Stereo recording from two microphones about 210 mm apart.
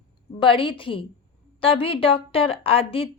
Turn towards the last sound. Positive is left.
turn(degrees=25)  # may be behind; listen again after turning